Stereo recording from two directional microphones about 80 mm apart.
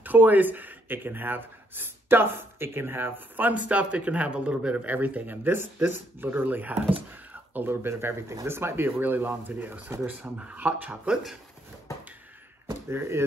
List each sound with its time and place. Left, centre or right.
0.0 s speech: right